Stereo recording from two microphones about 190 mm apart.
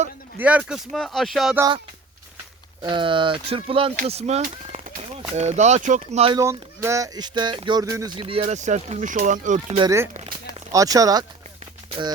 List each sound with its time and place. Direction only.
0.3 s speech: 5° right (ahead or behind)
1.5 s speech: 20° right (ahead or behind)
2.8 s speech: 25° right (ahead or behind)
6.3 s speech: 15° right (ahead or behind); by 9.6 s 40° right (ahead or behind)
9.7 s speech: 20° right (ahead or behind)
10.2 s a sound: 20° right (ahead or behind)